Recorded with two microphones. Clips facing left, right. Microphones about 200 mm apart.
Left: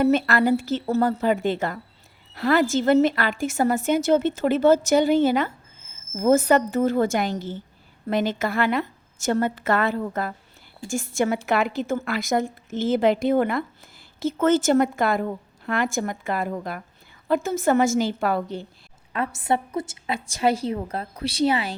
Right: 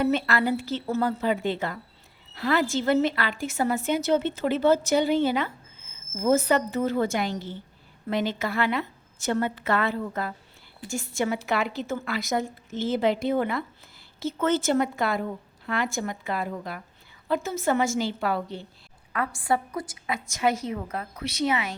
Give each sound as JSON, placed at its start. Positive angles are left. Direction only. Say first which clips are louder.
{"t": 0.0, "sound": "a woman's voice", "louder": "left 5 dB", "side_deg": 45}
{"t": 19.1, "sound": "a woman's voice", "louder": "left 2 dB", "side_deg": 25}